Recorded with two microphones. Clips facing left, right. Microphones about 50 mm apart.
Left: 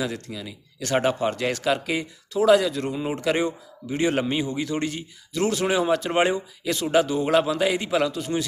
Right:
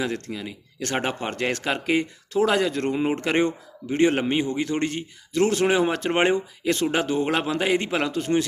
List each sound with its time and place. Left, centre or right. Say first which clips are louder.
0.3 s speech: right 2 dB; right
1.3 s speech: left 2 dB; right